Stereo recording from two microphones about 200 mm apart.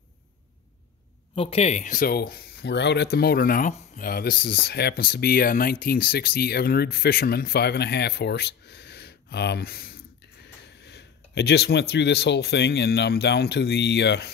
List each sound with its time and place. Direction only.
1.3 s speech: 30° left (ahead or behind); by 14.3 s 60° left (ahead or behind)